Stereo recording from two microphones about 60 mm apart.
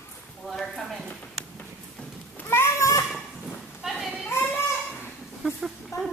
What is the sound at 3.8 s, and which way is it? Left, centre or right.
Clip-clop, centre.